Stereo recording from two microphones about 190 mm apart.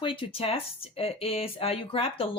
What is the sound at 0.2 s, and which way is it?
Speech, 30° left (ahead or behind).